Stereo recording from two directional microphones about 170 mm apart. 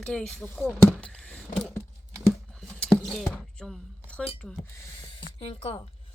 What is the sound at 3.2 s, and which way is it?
Speech, 5° left (ahead or behind).